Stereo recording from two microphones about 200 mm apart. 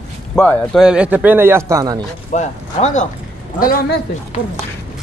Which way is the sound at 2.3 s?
35° left (ahead or behind).